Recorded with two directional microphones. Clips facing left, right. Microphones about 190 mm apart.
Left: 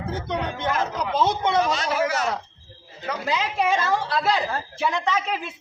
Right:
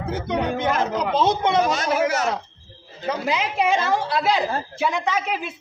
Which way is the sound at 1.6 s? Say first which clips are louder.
Right 3 dB; 45° right (ahead or behind).